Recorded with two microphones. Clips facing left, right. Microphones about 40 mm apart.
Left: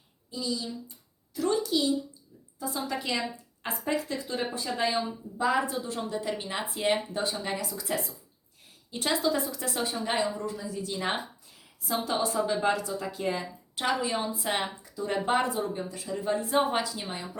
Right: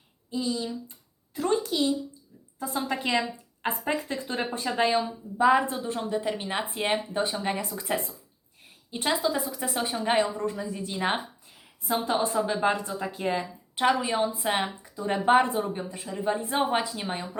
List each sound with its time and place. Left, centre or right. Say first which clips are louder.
0.3 s a child's voice: right 4 dB; right
8.9 s a woman's voice: right 1 dB; centre